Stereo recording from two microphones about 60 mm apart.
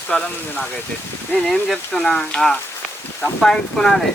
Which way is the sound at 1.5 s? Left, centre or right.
Centre.